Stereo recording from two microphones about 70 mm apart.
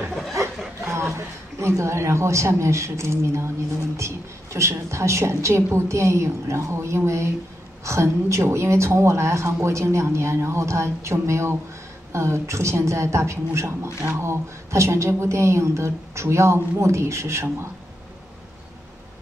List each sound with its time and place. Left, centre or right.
0.9 s a woman's voice: right